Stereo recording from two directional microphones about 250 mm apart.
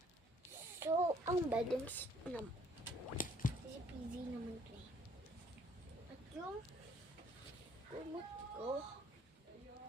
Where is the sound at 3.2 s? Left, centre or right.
Left.